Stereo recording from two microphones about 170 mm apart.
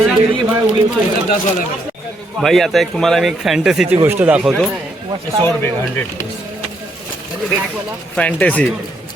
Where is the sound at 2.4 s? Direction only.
Centre (ahead or behind).